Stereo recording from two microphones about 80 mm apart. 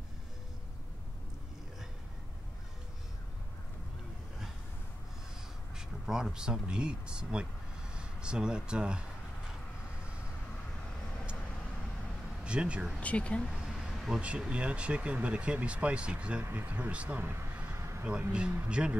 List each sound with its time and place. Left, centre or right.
5.8 s speech: centre
12.4 s speech: centre
13.0 s speech: centre
13.5 s a sound: centre
14.2 s speech: centre
17.7 s a sound: right
18.3 s speech: centre